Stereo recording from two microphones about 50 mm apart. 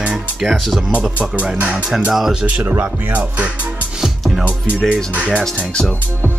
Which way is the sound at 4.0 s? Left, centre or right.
Centre.